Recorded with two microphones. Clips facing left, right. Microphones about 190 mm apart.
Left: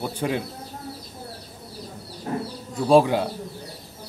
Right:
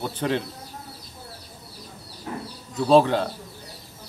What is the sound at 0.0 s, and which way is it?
Speech, 10° left (ahead or behind).